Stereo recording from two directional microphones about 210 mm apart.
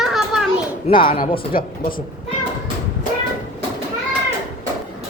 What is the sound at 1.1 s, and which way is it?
Speech, 40° left (ahead or behind).